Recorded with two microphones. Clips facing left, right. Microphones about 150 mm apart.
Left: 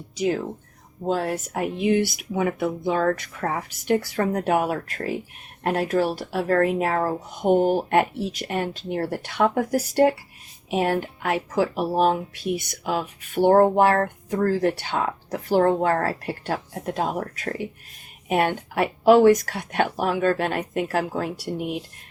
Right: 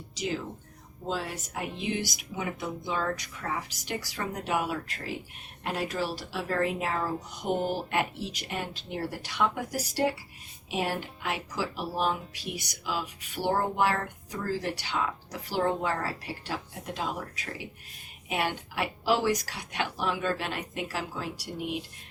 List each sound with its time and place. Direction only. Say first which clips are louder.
0.2 s speech: left 9 dB; 55° left (ahead or behind)